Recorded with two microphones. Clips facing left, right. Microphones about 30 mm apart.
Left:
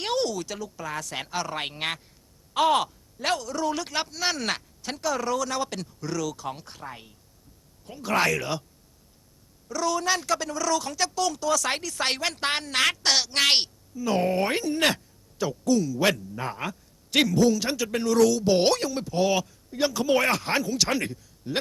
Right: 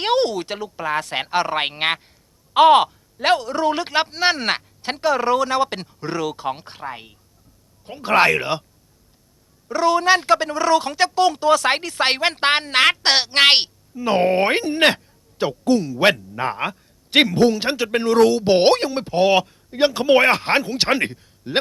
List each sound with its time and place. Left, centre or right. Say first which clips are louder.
0.0 s speech: right 8 dB; right
9.6 s speech: right 9 dB; right